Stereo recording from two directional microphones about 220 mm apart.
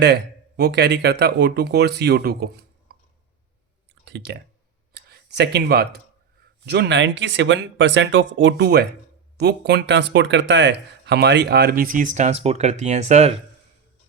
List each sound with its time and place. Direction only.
0.0 s speech: 50° right (ahead or behind)
4.0 s speech: 50° right (ahead or behind); by 13.3 s 30° right (ahead or behind)